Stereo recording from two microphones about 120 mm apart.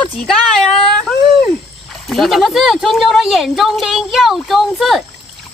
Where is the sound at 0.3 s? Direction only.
5° left (ahead or behind).